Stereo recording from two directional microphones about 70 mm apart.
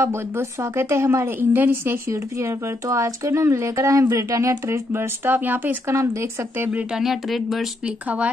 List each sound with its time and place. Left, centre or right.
0.0 s a woman's voice: right
2.0 s speech: right
7.0 s speech: centre
7.8 s speech: centre